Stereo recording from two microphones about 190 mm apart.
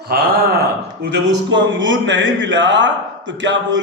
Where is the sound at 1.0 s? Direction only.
65° right (ahead or behind).